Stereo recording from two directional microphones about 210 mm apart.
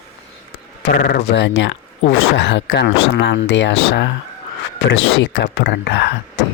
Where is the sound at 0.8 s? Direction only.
55° left (ahead or behind).